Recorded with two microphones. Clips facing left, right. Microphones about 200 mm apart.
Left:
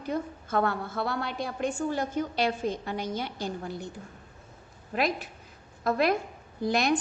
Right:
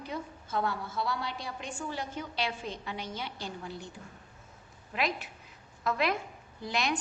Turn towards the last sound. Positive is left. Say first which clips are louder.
# left 7 dB
turn(degrees=45)  # may be behind; listen again after turning